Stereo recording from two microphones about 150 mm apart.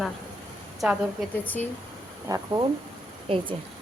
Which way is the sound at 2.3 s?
20° right (ahead or behind).